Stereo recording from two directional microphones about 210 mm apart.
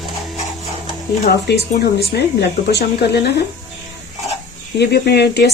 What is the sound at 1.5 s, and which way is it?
Speech, 55° left (ahead or behind).